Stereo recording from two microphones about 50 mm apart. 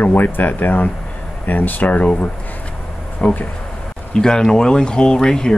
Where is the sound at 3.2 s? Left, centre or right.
Left.